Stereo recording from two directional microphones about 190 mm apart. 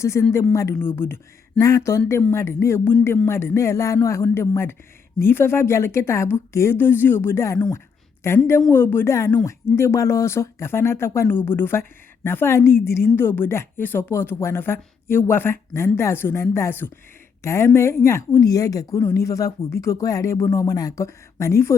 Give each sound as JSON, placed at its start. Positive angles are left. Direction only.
{"t": 0.0, "sound": "speech", "side_deg": 15}